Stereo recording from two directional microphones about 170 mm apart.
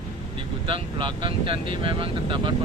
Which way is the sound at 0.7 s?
30° right (ahead or behind).